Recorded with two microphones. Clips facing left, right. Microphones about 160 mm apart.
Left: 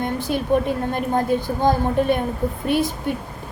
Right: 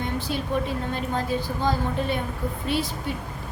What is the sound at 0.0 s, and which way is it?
A woman's voice, 50° left (ahead or behind).